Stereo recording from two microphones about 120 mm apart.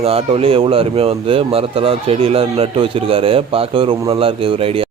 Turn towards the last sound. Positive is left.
turn(degrees=-50)  # may be behind; listen again after turning